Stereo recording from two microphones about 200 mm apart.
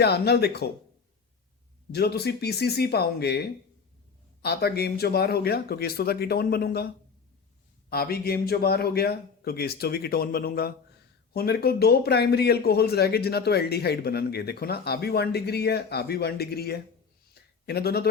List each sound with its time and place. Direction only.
0.0 s speech: 55° left (ahead or behind)
1.9 s speech: 55° left (ahead or behind)
4.4 s speech: 55° left (ahead or behind)